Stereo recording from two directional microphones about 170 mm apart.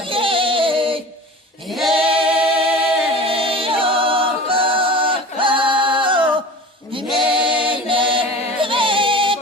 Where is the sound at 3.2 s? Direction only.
30° right (ahead or behind).